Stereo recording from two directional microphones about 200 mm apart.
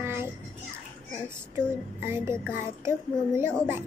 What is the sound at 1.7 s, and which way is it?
Speech, 10° right (ahead or behind).